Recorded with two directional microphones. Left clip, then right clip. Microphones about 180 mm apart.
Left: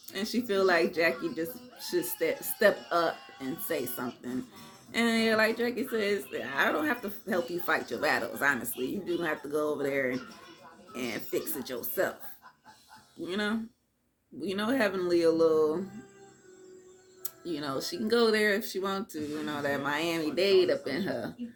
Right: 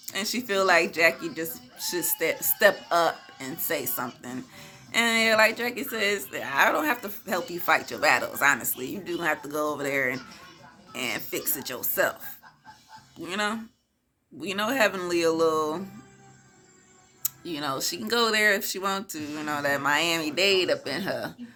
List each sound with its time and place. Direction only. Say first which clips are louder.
0.0 s speech: right 4 dB; 15° right (ahead or behind)
13.2 s speech: right 4 dB; 15° right (ahead or behind)
17.2 s speech: right 5 dB; 15° right (ahead or behind)